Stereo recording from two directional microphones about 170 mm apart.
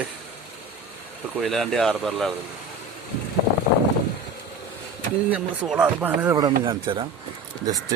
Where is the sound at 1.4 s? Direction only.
Centre (ahead or behind).